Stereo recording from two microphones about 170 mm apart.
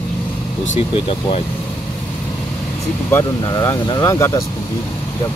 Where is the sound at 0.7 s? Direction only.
35° left (ahead or behind).